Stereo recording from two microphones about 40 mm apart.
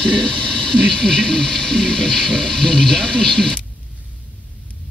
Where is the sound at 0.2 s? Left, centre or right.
Left.